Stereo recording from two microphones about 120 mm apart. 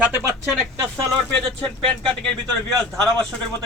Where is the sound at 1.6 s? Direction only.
5° left (ahead or behind).